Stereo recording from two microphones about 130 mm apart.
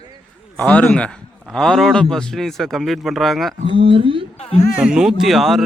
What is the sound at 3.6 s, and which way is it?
Speech, 45° right (ahead or behind).